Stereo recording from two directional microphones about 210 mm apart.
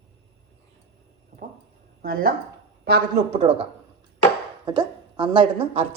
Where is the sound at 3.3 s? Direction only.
25° right (ahead or behind).